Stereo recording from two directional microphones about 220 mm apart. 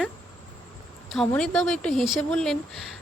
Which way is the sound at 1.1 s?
Centre (ahead or behind).